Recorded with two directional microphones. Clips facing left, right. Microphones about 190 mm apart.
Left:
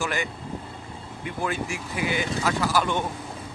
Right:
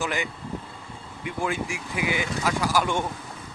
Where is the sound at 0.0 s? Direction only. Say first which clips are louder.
Even; 15° right (ahead or behind).